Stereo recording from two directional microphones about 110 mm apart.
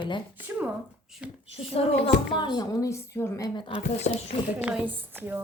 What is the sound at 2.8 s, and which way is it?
Speech, 25° left (ahead or behind).